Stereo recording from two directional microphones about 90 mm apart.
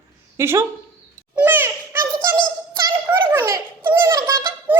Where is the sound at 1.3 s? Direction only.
20° right (ahead or behind).